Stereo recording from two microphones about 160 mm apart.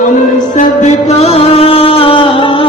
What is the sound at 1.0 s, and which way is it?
Music, 40° left (ahead or behind).